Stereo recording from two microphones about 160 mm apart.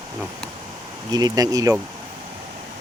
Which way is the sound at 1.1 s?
25° right (ahead or behind).